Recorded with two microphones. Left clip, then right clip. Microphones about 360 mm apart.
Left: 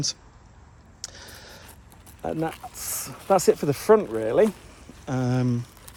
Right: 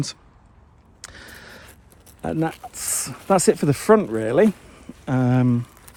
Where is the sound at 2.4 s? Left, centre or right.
Right.